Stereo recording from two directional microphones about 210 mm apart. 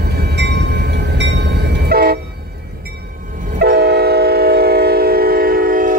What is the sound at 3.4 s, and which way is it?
Train, 45° right (ahead or behind).